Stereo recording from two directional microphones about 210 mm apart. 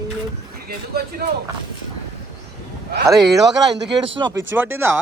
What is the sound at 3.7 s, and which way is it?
Speech, 55° right (ahead or behind).